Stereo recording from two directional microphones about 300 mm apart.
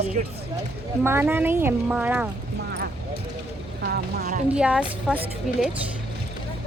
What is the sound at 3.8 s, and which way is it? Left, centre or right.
Speech, right.